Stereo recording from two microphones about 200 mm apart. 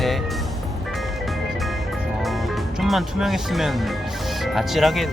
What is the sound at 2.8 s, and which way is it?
Speech, centre (ahead or behind).